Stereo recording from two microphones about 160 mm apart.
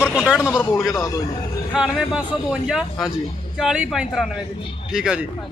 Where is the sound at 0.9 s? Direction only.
20° left (ahead or behind).